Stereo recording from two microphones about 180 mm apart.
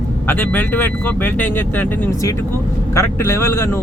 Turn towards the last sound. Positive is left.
turn(degrees=15)  # may be behind; listen again after turning